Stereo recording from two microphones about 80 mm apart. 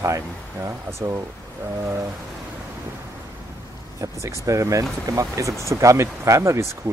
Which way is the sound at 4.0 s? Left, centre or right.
Right.